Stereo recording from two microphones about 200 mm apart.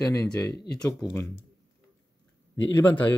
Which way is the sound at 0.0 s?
15° left (ahead or behind).